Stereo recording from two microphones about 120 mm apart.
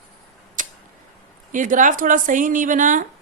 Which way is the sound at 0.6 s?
90° right.